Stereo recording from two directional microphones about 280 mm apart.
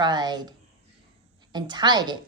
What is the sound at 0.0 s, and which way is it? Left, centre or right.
Speech, centre.